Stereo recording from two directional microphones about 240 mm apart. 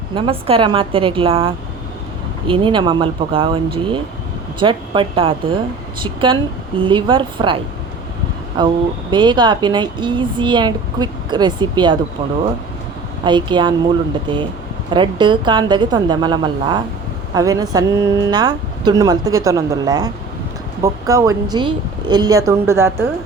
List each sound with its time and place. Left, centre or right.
0.1 s speech: right
13.2 s speech: centre